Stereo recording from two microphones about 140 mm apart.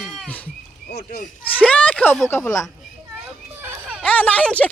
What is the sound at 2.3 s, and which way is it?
Speech, 20° left (ahead or behind).